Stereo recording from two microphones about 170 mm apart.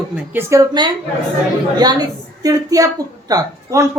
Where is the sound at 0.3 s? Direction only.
20° right (ahead or behind).